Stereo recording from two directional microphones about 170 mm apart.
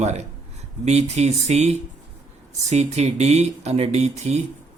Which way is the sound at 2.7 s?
40° right (ahead or behind).